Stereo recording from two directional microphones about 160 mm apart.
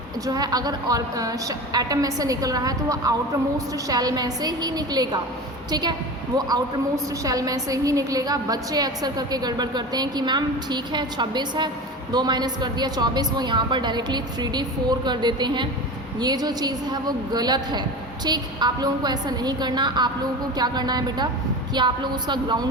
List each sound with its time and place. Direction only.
0.3 s a woman's voice: 25° right (ahead or behind)
7.3 s a woman's voice: 20° right (ahead or behind)